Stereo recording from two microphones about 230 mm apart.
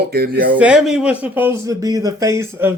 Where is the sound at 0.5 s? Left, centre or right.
Centre.